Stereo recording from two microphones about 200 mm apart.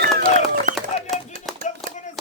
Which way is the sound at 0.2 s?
45° right (ahead or behind).